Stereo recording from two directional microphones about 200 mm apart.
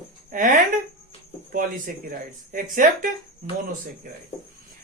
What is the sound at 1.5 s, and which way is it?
Speech, 45° right (ahead or behind).